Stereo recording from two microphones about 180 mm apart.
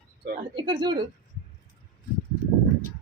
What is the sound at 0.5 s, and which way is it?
Speech, 25° right (ahead or behind).